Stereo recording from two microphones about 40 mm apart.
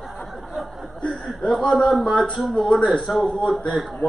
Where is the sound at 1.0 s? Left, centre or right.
Left.